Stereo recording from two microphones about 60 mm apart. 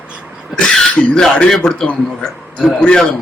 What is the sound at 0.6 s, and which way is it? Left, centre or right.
Throat clearing, centre.